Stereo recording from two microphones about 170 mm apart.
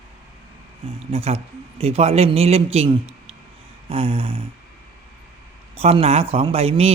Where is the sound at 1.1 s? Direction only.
35° right (ahead or behind).